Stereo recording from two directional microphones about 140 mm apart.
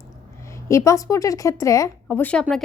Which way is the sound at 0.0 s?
20° left (ahead or behind).